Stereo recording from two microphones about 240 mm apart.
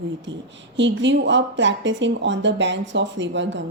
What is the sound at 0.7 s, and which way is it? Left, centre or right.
A woman's voice, right.